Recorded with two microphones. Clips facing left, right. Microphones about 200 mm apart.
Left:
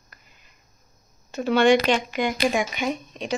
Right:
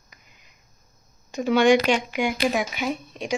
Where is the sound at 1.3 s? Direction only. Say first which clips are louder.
Even; 10° right (ahead or behind).